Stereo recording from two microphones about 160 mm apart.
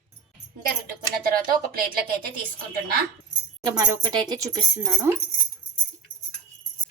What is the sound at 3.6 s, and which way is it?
Speech, 25° right (ahead or behind).